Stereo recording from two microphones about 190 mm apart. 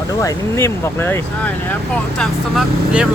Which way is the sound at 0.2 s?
15° left (ahead or behind).